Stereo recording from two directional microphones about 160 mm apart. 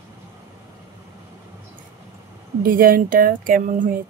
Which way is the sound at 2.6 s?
60° right (ahead or behind).